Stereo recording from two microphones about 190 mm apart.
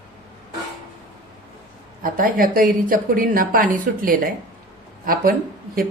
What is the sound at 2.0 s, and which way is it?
A woman's voice, 45° right (ahead or behind).